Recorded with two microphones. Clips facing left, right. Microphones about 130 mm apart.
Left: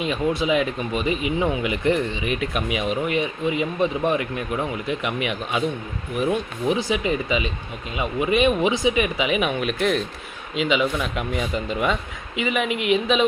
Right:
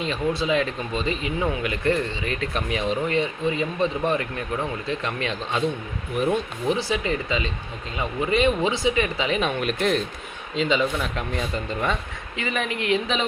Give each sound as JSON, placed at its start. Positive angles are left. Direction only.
{"t": 0.0, "sound": "speech", "side_deg": 15}
{"t": 6.7, "sound": "speech", "side_deg": 15}